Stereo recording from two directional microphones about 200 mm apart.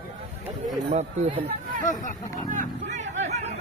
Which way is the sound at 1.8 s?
40° left (ahead or behind).